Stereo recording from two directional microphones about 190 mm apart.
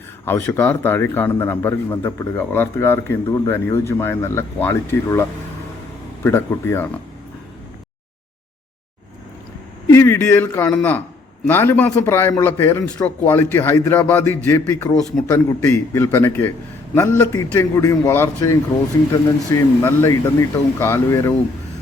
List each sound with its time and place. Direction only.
0.3 s a man's voice: 10° left (ahead or behind)
9.8 s a man's voice: 15° left (ahead or behind)